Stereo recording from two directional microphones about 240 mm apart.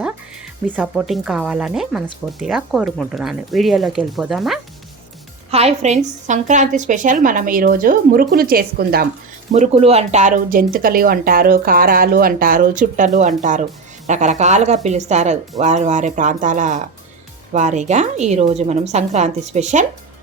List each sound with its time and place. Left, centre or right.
0.7 s speech: centre
5.5 s speech: right
9.5 s a woman's voice: right